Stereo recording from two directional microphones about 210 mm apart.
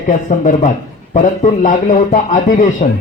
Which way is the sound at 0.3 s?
35° left (ahead or behind).